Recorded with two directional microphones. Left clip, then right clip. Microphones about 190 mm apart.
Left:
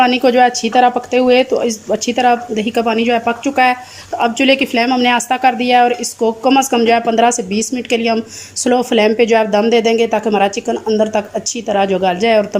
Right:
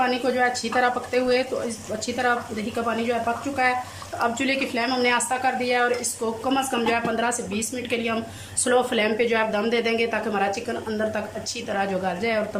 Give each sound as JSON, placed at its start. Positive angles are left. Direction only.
{"t": 0.0, "sound": "a woman's voice", "side_deg": 45}